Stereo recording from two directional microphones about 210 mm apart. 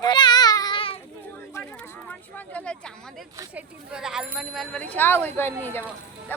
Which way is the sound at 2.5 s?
5° left (ahead or behind).